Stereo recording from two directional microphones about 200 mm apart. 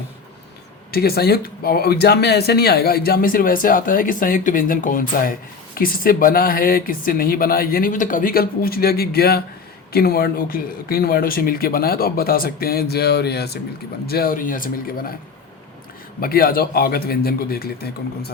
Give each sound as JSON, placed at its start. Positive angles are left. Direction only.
{"t": 0.9, "sound": "speech", "side_deg": 50}
{"t": 16.2, "sound": "speech", "side_deg": 45}